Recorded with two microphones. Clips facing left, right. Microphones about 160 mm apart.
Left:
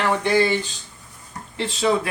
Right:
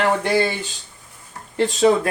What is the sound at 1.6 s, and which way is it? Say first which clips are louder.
Speech: right 5 dB; 45° right (ahead or behind).